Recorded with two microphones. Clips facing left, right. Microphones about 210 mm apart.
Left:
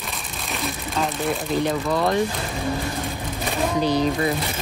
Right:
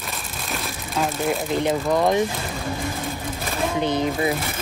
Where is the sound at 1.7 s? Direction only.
15° right (ahead or behind).